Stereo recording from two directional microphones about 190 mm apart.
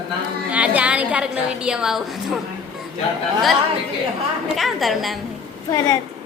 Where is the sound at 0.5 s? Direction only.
5° right (ahead or behind).